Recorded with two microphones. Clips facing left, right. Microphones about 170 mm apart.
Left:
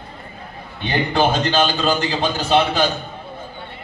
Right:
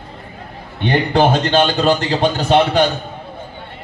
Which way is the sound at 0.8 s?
60° right (ahead or behind).